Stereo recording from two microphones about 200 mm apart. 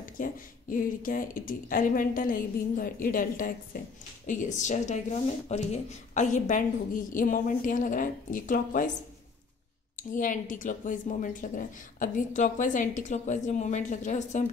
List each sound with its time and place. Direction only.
0.2 s speech: 45° left (ahead or behind)
10.1 s speech: 40° left (ahead or behind)